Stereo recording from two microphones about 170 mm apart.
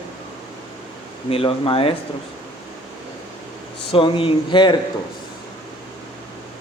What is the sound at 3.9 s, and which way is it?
Speech, 30° left (ahead or behind).